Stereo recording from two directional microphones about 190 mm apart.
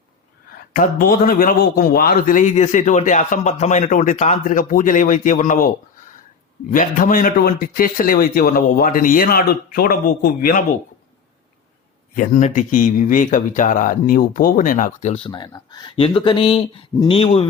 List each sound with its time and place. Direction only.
0.7 s a man's voice: 50° left (ahead or behind)
12.1 s speech: 45° left (ahead or behind)